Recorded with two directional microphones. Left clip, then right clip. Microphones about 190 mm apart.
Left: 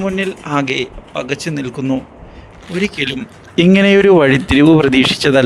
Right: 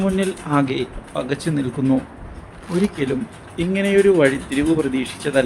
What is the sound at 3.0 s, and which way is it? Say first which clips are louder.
Speech: left 4 dB; 45° left (ahead or behind).